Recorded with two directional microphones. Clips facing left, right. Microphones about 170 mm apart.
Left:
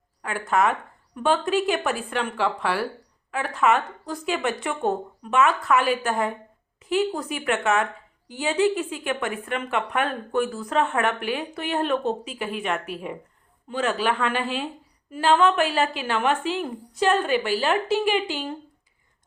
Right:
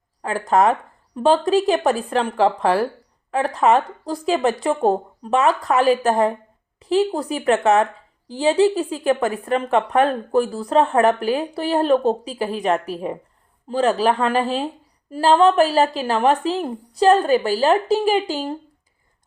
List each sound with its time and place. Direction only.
0.2 s a woman's voice: 35° right (ahead or behind)